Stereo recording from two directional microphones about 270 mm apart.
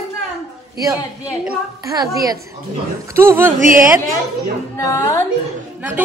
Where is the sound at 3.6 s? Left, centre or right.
Right.